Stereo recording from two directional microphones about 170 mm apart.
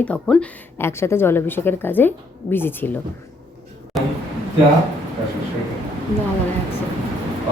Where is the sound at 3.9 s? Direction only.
Centre (ahead or behind).